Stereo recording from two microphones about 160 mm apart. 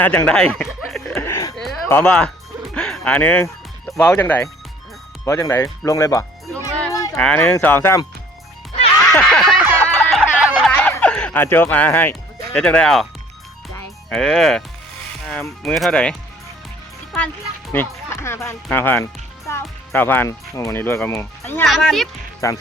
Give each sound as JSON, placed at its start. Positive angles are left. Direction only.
{"t": 0.0, "sound": "speech", "side_deg": 10}
{"t": 1.1, "sound": "music", "side_deg": 15}
{"t": 1.9, "sound": "speech", "side_deg": 10}
{"t": 7.2, "sound": "speech", "side_deg": 5}
{"t": 9.1, "sound": "a sound", "side_deg": 5}
{"t": 9.8, "sound": "music", "side_deg": 5}
{"t": 10.8, "sound": "music", "side_deg": 10}
{"t": 12.5, "sound": "speech", "side_deg": 5}
{"t": 14.1, "sound": "speech", "side_deg": 0}
{"t": 17.7, "sound": "speech", "side_deg": 15}
{"t": 21.6, "sound": "speech", "side_deg": 0}
{"t": 22.4, "sound": "speech", "side_deg": 20}